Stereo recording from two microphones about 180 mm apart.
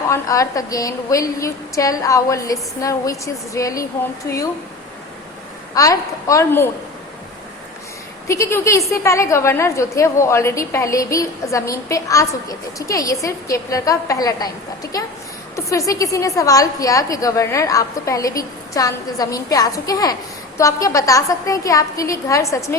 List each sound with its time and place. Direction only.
0.1 s a woman's voice: 20° left (ahead or behind)
5.7 s a woman's voice: 20° left (ahead or behind)
8.3 s a woman's voice: 15° left (ahead or behind)